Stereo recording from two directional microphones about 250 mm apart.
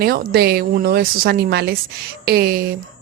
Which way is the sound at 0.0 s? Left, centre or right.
Right.